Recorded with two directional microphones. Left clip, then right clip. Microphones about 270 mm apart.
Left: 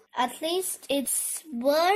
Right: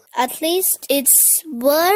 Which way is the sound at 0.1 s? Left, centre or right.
Right.